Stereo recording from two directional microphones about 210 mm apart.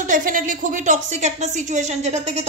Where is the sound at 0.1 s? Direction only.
40° right (ahead or behind).